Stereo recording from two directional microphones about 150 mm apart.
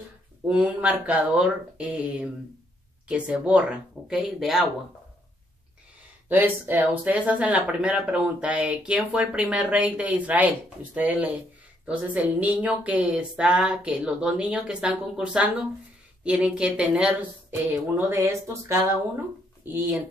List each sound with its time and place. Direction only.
0.5 s speech: 10° right (ahead or behind)
6.2 s speech: 10° right (ahead or behind)